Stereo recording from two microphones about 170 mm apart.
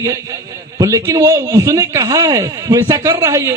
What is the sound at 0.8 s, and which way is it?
A man's voice, 20° right (ahead or behind).